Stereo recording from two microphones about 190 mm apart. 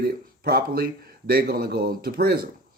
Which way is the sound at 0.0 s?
50° right (ahead or behind).